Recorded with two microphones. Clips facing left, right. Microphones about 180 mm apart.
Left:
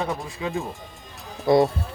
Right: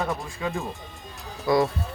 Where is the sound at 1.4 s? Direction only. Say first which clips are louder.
Left 4 dB; 25° left (ahead or behind).